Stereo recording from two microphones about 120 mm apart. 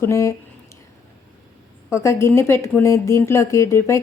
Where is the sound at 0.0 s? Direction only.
25° left (ahead or behind).